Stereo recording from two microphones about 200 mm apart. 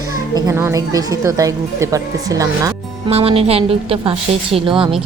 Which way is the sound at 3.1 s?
30° right (ahead or behind).